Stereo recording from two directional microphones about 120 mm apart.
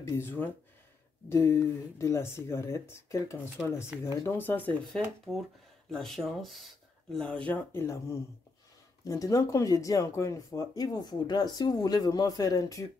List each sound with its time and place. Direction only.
0.2 s speech: 20° left (ahead or behind)
4.4 s speech: 15° left (ahead or behind)
4.9 s speech: 5° left (ahead or behind); by 12.8 s 30° left (ahead or behind)